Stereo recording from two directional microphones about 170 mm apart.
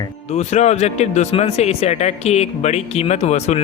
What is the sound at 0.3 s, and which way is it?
Speech, 40° left (ahead or behind).